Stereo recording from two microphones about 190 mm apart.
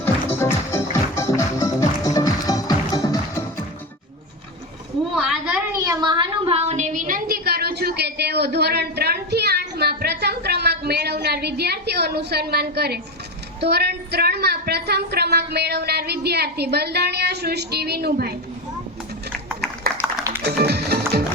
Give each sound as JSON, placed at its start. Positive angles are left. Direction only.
{"t": 0.0, "sound": "music", "side_deg": 10}
{"t": 5.2, "sound": "a sound", "side_deg": -5}
{"t": 5.8, "sound": "a sound", "side_deg": -20}
{"t": 13.6, "sound": "a woman's voice", "side_deg": -60}
{"t": 20.0, "sound": "music", "side_deg": -5}
{"t": 20.4, "sound": "music", "side_deg": -60}